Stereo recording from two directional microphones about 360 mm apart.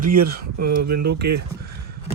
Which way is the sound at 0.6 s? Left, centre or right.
Right.